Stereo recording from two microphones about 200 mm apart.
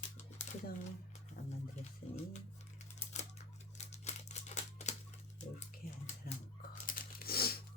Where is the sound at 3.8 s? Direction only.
35° left (ahead or behind).